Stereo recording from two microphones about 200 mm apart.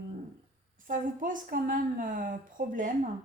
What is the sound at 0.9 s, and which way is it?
Speech, 40° right (ahead or behind).